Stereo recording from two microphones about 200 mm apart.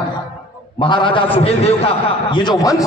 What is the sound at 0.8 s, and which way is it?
A man's voice, 25° left (ahead or behind).